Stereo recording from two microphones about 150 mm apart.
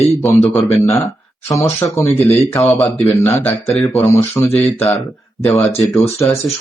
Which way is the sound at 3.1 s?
20° left (ahead or behind).